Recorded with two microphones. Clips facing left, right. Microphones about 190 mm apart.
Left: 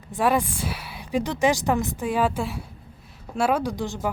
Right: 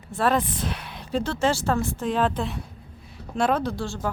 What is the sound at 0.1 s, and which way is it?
Speech, 10° left (ahead or behind).